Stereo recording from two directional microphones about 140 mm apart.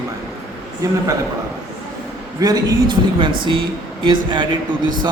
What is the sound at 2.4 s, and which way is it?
A man's voice, 30° right (ahead or behind).